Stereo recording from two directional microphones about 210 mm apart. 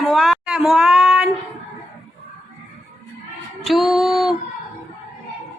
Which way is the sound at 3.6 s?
Centre (ahead or behind).